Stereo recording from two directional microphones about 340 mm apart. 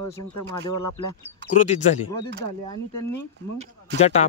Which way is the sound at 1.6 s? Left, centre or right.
Left.